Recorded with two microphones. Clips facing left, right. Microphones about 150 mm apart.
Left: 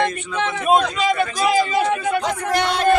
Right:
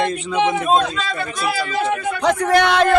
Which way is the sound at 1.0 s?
15° left (ahead or behind).